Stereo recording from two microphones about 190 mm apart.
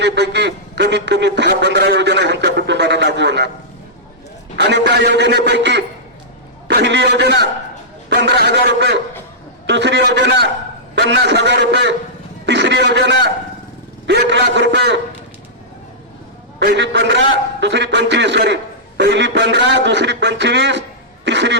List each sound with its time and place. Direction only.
0.0 s a man's voice: 65° right (ahead or behind)
4.5 s a man's voice: 65° right (ahead or behind)
12.5 s a sound: 70° right (ahead or behind)
14.1 s a man's voice: 70° right (ahead or behind)
16.6 s a man's voice: 65° right (ahead or behind)